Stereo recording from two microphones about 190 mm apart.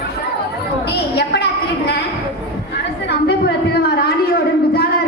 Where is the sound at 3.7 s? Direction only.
55° left (ahead or behind).